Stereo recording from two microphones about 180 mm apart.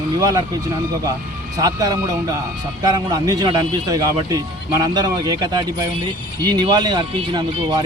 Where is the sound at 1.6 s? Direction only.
20° right (ahead or behind).